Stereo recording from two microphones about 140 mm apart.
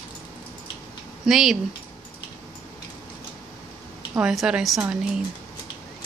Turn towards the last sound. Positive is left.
turn(degrees=-5)  # may be behind; listen again after turning